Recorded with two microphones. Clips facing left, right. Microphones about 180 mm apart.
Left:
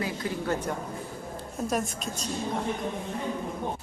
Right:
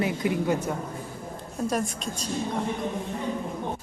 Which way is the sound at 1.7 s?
Centre (ahead or behind).